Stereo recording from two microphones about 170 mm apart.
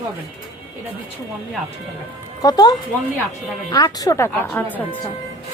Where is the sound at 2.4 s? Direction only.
20° left (ahead or behind).